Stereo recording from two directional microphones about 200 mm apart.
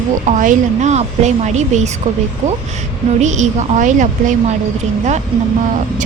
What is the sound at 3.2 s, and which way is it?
A woman's voice, 35° right (ahead or behind).